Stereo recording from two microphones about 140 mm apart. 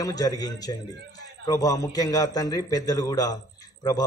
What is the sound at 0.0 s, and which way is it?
Speech, 25° left (ahead or behind).